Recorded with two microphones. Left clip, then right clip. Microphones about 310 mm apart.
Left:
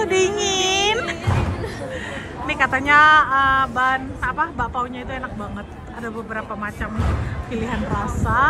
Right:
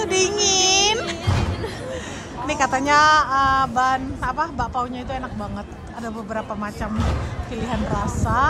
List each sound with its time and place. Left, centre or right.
0.0 s music: centre
2.4 s speech: centre
6.3 s speech: centre